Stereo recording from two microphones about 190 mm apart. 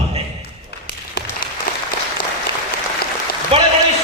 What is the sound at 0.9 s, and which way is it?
Applause, 50° left (ahead or behind).